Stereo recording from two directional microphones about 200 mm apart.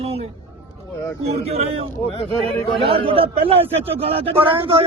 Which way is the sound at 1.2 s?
30° right (ahead or behind).